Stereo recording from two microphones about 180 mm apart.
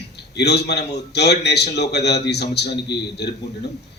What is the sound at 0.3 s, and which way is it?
A man's voice, 70° left (ahead or behind).